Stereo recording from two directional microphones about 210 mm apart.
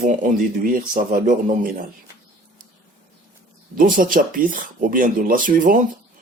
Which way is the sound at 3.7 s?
40° right (ahead or behind).